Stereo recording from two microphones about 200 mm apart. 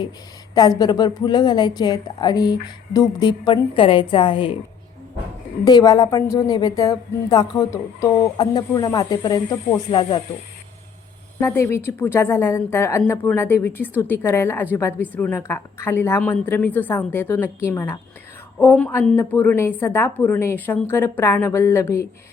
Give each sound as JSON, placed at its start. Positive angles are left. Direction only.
{"t": 0.8, "sound": "a woman's voice", "side_deg": 20}
{"t": 5.6, "sound": "a woman's voice", "side_deg": 20}
{"t": 11.3, "sound": "speech", "side_deg": 15}